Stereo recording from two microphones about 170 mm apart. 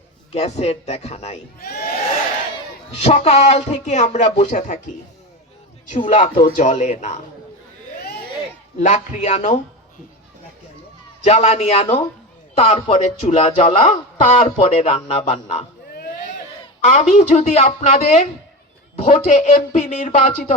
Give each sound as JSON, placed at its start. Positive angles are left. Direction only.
{"t": 0.3, "sound": "speech", "side_deg": 40}
{"t": 3.0, "sound": "speech", "side_deg": 40}
{"t": 6.0, "sound": "speech", "side_deg": 40}
{"t": 8.8, "sound": "speech", "side_deg": 45}
{"t": 11.2, "sound": "speech", "side_deg": 40}
{"t": 15.9, "sound": "a sound", "side_deg": 55}
{"t": 16.8, "sound": "speech", "side_deg": 45}